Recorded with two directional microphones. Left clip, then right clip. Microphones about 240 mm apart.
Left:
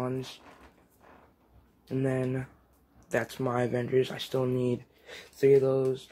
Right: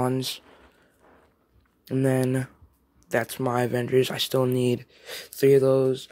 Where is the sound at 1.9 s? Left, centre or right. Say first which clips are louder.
Right 6 dB; right.